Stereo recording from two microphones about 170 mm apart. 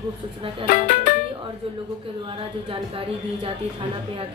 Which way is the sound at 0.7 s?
50° left (ahead or behind).